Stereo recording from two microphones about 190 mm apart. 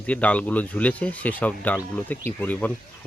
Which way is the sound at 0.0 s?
5° left (ahead or behind).